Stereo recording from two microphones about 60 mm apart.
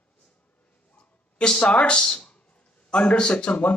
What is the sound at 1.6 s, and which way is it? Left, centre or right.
Speech, centre.